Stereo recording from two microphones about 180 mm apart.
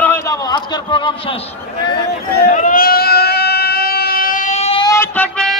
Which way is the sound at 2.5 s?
50° left (ahead or behind).